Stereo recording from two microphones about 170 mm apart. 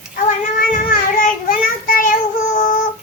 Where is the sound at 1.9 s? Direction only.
55° left (ahead or behind).